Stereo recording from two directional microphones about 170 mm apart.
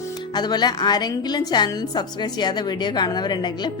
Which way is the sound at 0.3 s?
25° left (ahead or behind).